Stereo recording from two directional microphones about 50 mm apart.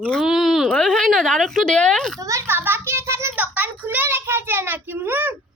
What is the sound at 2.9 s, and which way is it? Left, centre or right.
Speech, right.